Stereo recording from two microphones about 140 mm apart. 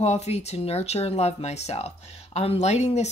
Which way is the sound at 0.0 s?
50° left (ahead or behind).